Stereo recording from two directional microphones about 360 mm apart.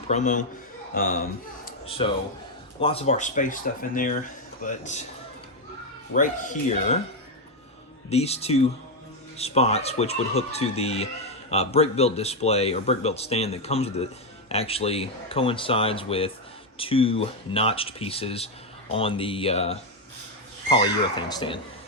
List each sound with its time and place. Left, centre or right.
0.1 s speech: centre
1.6 s a sound: centre
2.8 s speech: centre
6.1 s speech: left
8.1 s speech: centre